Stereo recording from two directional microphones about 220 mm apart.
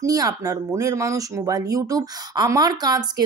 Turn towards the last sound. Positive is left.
turn(degrees=-20)  # may be behind; listen again after turning